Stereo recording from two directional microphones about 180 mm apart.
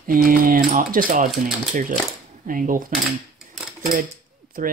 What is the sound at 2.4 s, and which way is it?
Speech, 50° right (ahead or behind).